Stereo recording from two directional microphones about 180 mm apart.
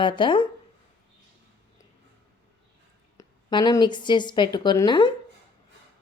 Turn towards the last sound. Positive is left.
turn(degrees=25)  # may be behind; listen again after turning